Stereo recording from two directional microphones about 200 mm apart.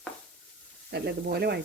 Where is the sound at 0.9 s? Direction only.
55° right (ahead or behind).